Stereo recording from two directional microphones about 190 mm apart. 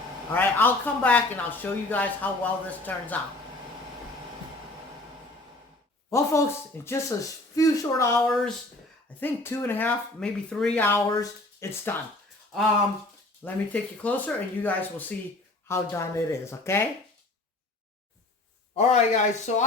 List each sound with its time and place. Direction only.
0.3 s speech: 10° left (ahead or behind)
6.1 s speech: 15° left (ahead or behind)
8.3 s speech: centre (ahead or behind)
9.2 s speech: 10° left (ahead or behind)
13.4 s speech: 10° left (ahead or behind)
18.8 s speech: 35° left (ahead or behind)